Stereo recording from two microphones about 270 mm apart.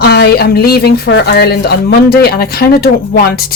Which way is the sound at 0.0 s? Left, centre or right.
Left.